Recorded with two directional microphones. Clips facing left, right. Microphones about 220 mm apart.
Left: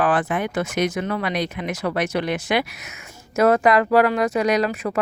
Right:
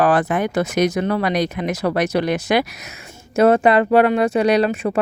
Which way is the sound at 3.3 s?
30° right (ahead or behind).